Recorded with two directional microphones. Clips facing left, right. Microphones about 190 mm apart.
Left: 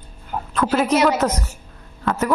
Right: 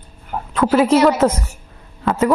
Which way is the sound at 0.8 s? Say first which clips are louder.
Right 4 dB; 30° right (ahead or behind).